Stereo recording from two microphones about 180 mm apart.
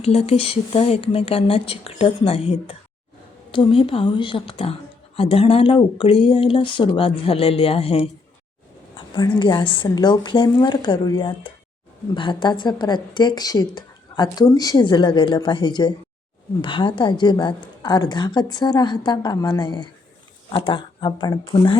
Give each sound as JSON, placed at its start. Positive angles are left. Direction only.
{"t": 0.0, "sound": "speech", "side_deg": 35}